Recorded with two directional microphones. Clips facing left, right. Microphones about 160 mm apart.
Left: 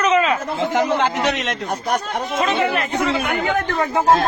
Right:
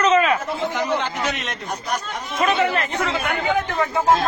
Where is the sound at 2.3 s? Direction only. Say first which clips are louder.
Even; 25° left (ahead or behind).